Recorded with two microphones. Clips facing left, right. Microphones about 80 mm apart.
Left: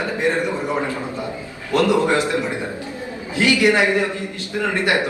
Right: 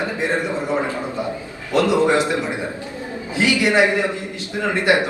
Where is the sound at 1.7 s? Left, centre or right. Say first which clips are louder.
Right 1 dB; right.